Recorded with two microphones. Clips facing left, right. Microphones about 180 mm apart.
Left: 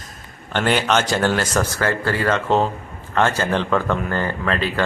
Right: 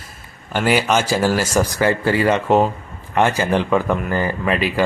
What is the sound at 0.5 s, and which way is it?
Speech, 5° right (ahead or behind).